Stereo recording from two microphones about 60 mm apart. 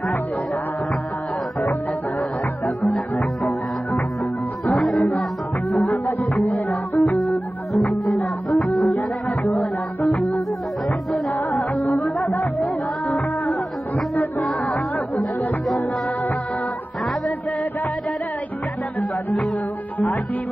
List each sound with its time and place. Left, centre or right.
2.6 s music: centre
4.6 s music: centre
6.5 s music: left
8.5 s music: centre
8.9 s music: left
10.0 s music: centre
14.4 s music: centre